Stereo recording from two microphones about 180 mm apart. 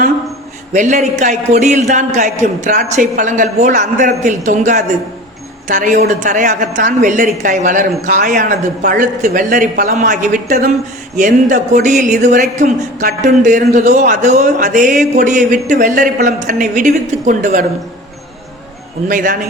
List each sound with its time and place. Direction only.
0.7 s speech: 40° right (ahead or behind)
19.0 s speech: 50° right (ahead or behind)